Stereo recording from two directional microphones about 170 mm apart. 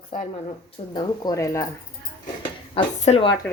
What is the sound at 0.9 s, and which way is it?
Speech, 20° left (ahead or behind).